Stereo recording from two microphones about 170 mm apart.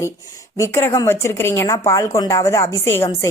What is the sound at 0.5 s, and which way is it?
Speech, 15° left (ahead or behind).